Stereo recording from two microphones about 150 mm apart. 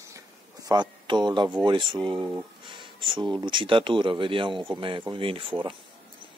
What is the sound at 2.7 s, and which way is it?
Speech, 30° right (ahead or behind).